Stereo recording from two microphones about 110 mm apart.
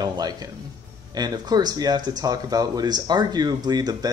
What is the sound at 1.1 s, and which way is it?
Speech, 40° right (ahead or behind).